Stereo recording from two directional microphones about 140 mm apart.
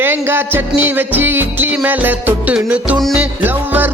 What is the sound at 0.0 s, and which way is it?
Music, 15° right (ahead or behind).